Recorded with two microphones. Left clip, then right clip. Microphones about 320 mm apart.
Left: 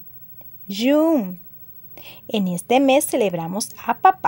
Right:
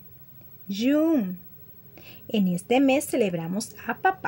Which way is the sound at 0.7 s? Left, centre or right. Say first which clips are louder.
Left 6 dB; left.